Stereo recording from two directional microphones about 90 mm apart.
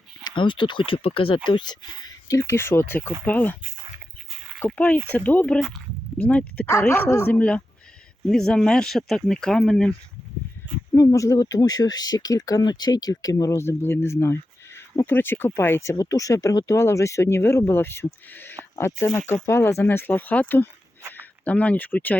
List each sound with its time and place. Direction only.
0.3 s speech: 65° left (ahead or behind); by 1.4 s 85° left
1.5 s speech: 55° left (ahead or behind)
2.2 s speech: 40° left (ahead or behind); by 3.6 s 20° left (ahead or behind)
4.6 s speech: 15° left (ahead or behind)
6.7 s speech: 30° left (ahead or behind); by 9.9 s 5° left (ahead or behind)
10.9 s speech: 35° left (ahead or behind)
16.0 s speech: 40° left (ahead or behind); by 22.2 s 15° left (ahead or behind)